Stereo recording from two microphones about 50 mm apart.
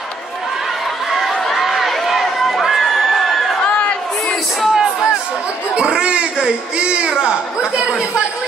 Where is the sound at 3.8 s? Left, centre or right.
Left.